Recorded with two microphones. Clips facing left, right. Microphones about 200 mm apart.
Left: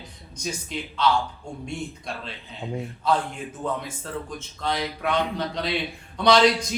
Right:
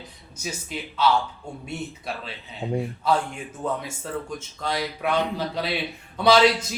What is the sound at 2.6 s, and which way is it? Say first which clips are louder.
Speech: right 5 dB; 40° right (ahead or behind).